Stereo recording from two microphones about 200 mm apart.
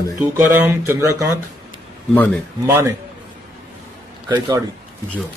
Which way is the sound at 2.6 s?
10° right (ahead or behind).